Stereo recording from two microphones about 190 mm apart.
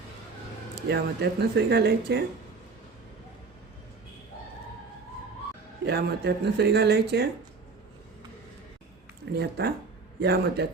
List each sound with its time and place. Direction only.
0.8 s speech: 60° right (ahead or behind)
5.8 s speech: 60° right (ahead or behind)
9.4 s speech: 60° right (ahead or behind)